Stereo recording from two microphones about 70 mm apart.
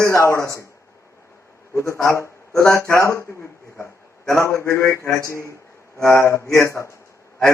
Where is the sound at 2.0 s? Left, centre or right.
Left.